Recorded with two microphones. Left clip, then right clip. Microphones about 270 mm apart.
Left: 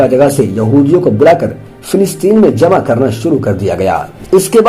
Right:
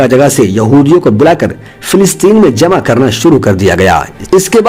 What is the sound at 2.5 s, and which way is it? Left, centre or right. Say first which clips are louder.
A man's voice: right 1 dB; right.